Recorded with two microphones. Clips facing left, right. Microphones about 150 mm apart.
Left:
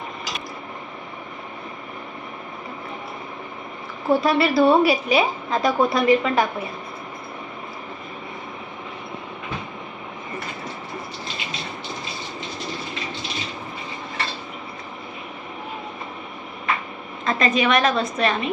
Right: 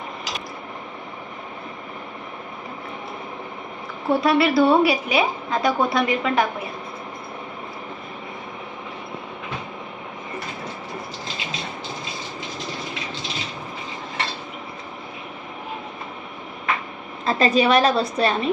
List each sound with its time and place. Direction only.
4.1 s a woman's voice: centre (ahead or behind)
17.2 s a woman's voice: 30° right (ahead or behind)